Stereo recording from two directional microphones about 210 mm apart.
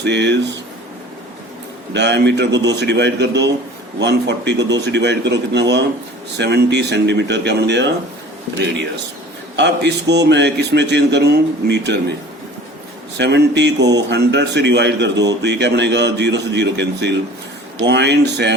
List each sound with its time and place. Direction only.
0.0 s speech: 55° right (ahead or behind)
1.9 s speech: 55° right (ahead or behind)
9.6 s speech: 55° right (ahead or behind)
13.1 s speech: 55° right (ahead or behind)